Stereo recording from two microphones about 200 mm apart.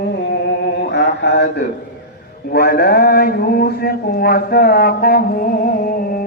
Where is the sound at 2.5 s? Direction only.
50° left (ahead or behind).